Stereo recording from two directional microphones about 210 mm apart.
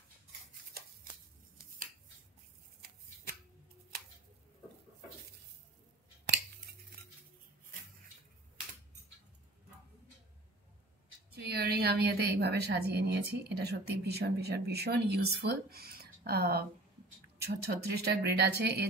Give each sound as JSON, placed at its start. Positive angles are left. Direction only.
{"t": 11.3, "sound": "a woman's voice", "side_deg": -50}